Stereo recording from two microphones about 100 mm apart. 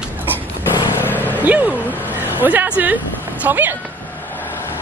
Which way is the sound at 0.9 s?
20° left (ahead or behind).